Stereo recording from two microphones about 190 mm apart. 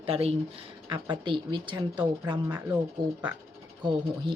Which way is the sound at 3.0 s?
25° right (ahead or behind).